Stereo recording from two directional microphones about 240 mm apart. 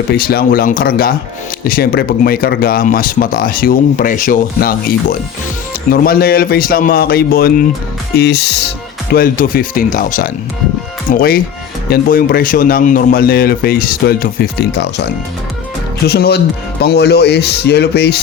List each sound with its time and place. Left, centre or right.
0.1 s speech: left
5.9 s speech: left
16.0 s speech: left